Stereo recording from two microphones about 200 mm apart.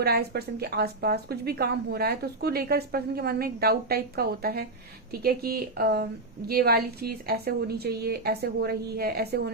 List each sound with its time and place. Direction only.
0.0 s a woman's voice: 55° right (ahead or behind)